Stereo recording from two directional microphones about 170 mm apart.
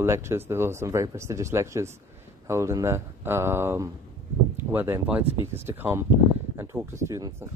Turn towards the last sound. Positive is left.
turn(degrees=-15)  # may be behind; listen again after turning